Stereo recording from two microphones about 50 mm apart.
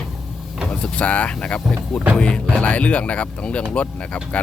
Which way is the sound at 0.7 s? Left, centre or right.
Centre.